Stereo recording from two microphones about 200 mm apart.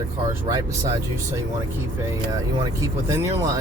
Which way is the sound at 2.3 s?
15° right (ahead or behind).